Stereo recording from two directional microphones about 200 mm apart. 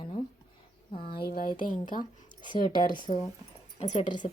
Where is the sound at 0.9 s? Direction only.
50° left (ahead or behind).